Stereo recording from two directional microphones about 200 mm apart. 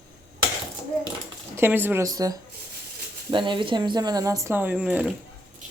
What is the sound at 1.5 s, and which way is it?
Speech, 10° right (ahead or behind).